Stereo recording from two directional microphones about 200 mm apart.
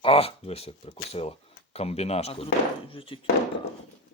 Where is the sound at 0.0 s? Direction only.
30° left (ahead or behind).